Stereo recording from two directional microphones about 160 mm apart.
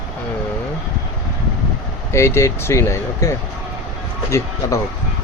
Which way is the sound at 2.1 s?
15° left (ahead or behind).